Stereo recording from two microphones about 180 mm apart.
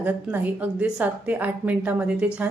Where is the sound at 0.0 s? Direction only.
10° right (ahead or behind).